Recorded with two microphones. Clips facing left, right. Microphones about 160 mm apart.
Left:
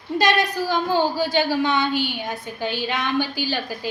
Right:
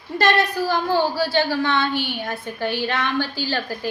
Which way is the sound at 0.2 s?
15° left (ahead or behind).